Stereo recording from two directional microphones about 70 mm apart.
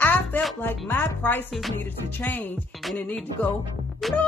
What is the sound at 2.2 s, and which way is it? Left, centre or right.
Speech, left.